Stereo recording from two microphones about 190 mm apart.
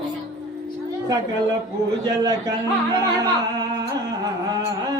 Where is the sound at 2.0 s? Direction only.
20° right (ahead or behind).